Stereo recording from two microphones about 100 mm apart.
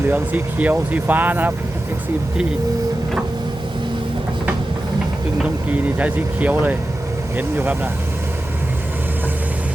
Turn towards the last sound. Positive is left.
turn(degrees=-20)  # may be behind; listen again after turning